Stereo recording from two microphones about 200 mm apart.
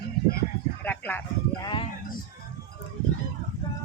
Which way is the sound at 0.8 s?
10° left (ahead or behind).